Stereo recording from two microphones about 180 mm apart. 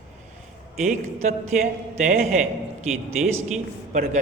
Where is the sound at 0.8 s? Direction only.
40° right (ahead or behind).